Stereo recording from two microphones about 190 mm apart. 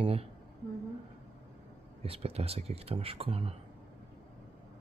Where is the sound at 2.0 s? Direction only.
30° right (ahead or behind).